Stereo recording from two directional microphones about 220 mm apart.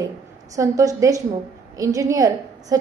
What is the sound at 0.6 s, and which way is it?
A woman's voice, 15° right (ahead or behind).